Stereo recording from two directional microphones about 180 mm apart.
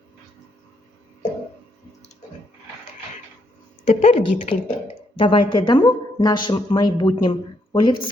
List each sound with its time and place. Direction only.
3.8 s a woman's voice: 45° left (ahead or behind)
5.1 s speech: 30° left (ahead or behind)